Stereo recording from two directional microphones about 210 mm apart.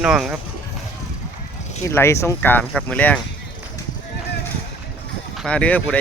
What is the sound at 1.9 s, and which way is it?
Speech, 15° left (ahead or behind).